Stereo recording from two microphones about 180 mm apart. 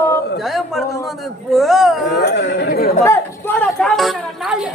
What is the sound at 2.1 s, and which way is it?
Speech, 70° left (ahead or behind).